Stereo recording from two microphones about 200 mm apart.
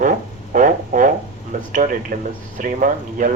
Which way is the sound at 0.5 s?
40° right (ahead or behind).